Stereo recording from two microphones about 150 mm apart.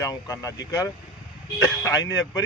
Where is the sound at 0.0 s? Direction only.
25° left (ahead or behind).